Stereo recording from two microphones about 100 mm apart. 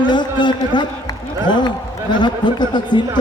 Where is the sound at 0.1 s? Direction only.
50° left (ahead or behind).